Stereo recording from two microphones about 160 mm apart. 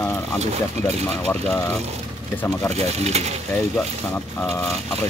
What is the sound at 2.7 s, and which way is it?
Speech, 40° right (ahead or behind).